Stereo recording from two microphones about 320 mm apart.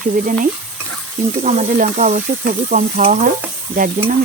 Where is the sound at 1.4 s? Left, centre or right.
Right.